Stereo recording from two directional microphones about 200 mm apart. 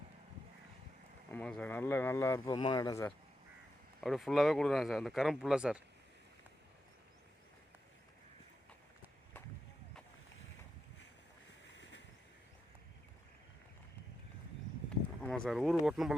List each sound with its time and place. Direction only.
1.3 s speech: 5° left (ahead or behind)
2.4 s speech: 25° left (ahead or behind)
4.0 s speech: centre (ahead or behind)
11.8 s boat: 65° left (ahead or behind)
15.2 s speech: 5° left (ahead or behind)